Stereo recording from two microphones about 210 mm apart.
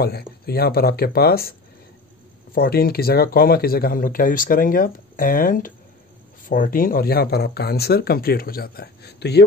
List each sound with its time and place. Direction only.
0.5 s speech: 50° left (ahead or behind)
2.5 s speech: 45° left (ahead or behind)